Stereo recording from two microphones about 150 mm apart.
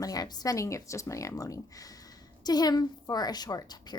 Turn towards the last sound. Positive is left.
turn(degrees=25)  # may be behind; listen again after turning